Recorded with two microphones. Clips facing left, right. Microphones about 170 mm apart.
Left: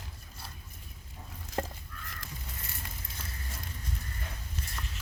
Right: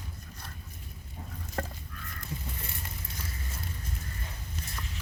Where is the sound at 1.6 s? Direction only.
15° left (ahead or behind).